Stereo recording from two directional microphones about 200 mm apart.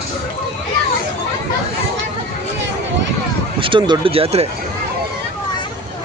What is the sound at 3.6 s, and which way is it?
Speech, 25° right (ahead or behind).